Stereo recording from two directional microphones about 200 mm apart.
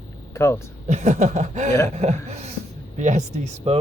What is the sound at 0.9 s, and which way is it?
Speech, 35° right (ahead or behind).